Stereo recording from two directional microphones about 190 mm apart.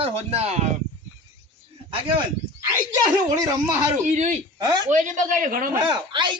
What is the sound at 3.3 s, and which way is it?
Speech, 20° right (ahead or behind).